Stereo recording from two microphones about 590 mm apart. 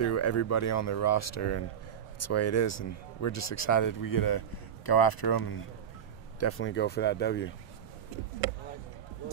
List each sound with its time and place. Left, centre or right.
0.0 s speech: left
6.4 s speech: centre